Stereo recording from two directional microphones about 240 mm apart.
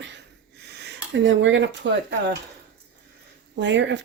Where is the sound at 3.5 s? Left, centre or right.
Right.